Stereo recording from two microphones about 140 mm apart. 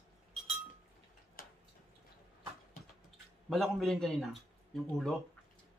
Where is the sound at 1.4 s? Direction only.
90° left.